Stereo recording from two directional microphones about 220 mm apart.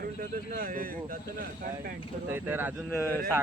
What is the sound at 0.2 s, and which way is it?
Speech, 40° right (ahead or behind).